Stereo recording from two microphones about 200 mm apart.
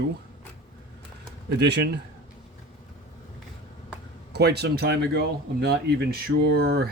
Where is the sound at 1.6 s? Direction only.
55° right (ahead or behind).